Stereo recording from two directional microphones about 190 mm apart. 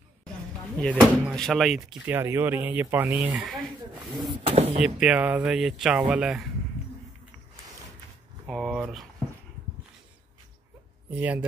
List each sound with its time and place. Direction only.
0.9 s speech: centre (ahead or behind)
4.4 s speech: 30° right (ahead or behind)
4.7 s speech: 5° right (ahead or behind)
8.5 s speech: centre (ahead or behind)
11.1 s speech: 10° right (ahead or behind)